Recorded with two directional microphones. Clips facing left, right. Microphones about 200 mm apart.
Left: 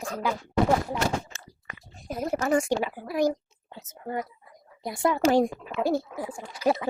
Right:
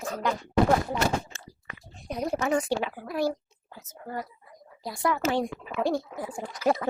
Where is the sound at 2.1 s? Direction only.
Centre (ahead or behind); by 5.2 s 25° left (ahead or behind).